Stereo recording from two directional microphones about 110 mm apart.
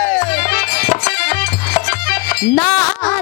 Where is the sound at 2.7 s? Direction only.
45° left (ahead or behind).